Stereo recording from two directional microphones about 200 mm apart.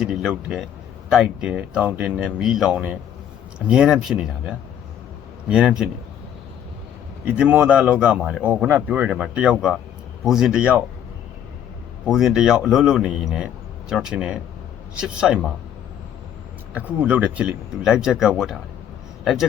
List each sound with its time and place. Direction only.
0.0 s speech: 5° right (ahead or behind)
7.3 s speech: 5° right (ahead or behind)
12.0 s speech: centre (ahead or behind)
16.7 s speech: 5° right (ahead or behind)